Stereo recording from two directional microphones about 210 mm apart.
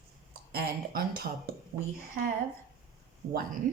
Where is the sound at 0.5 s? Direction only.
45° right (ahead or behind).